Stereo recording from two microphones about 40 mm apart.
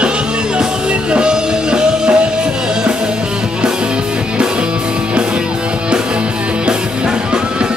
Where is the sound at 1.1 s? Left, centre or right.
Right.